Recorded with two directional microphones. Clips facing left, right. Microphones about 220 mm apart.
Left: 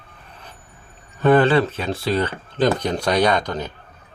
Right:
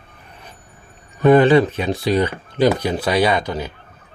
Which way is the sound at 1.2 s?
15° right (ahead or behind).